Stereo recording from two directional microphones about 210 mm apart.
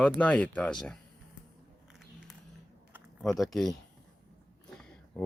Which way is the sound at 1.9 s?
Centre (ahead or behind).